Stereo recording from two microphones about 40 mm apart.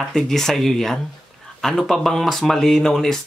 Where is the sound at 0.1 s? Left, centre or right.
Centre.